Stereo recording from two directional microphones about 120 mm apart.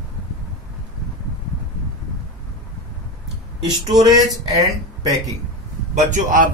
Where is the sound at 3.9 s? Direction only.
35° right (ahead or behind).